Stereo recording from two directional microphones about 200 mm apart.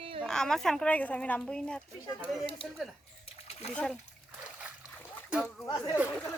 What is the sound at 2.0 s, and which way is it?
Speech, 25° left (ahead or behind).